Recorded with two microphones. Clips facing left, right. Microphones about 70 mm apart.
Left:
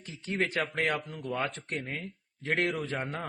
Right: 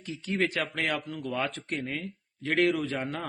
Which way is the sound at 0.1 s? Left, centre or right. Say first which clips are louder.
Right 2 dB; left.